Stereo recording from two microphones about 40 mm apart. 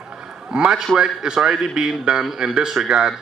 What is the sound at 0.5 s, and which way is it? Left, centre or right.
A man's voice, right.